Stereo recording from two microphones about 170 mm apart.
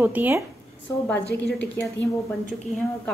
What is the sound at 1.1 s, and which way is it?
Speech, 80° left.